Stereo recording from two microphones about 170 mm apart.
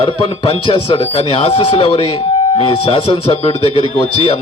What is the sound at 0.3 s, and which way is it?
Speech, 35° left (ahead or behind).